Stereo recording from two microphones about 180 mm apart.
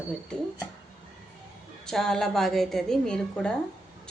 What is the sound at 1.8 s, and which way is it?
A woman's voice, 5° left (ahead or behind).